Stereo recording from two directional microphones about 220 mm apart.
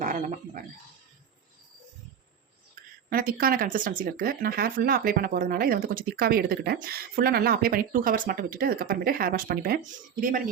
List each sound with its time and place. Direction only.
0.0 s speech: 35° right (ahead or behind)
3.1 s speech: 40° right (ahead or behind)